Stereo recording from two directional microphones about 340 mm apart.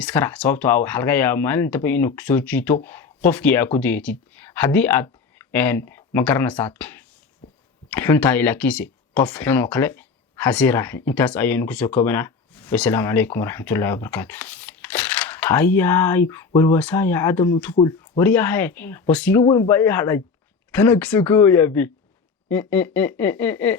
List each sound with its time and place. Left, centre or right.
0.0 s speech: centre
18.2 s speech: centre